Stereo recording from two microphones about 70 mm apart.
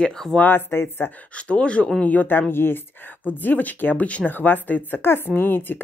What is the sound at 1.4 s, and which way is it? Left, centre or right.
Speech, centre.